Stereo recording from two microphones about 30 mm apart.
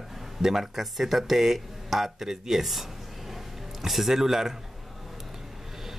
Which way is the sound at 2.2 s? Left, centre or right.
Centre.